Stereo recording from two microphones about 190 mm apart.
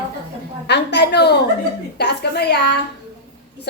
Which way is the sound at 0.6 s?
60° left (ahead or behind).